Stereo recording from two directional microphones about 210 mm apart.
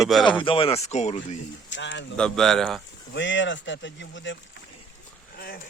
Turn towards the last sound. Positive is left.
turn(degrees=45)  # may be behind; listen again after turning